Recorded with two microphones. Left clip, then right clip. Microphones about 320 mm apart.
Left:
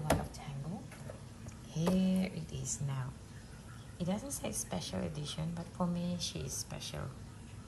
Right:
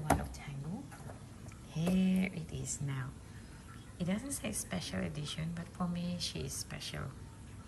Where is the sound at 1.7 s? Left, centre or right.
Centre.